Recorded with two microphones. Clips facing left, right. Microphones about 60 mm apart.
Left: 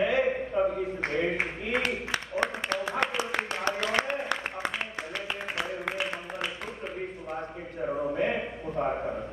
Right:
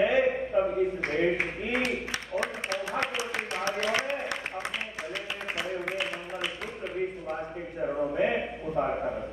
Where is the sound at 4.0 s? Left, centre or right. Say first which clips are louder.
Left 2 dB; left.